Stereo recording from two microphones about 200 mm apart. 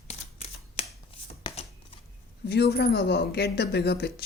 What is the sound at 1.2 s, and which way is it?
Shuffling cards, 30° left (ahead or behind).